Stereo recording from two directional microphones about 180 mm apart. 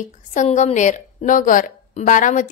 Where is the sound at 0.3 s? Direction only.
40° left (ahead or behind).